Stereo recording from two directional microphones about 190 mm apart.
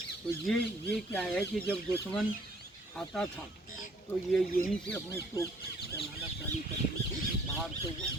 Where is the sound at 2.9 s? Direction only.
5° left (ahead or behind).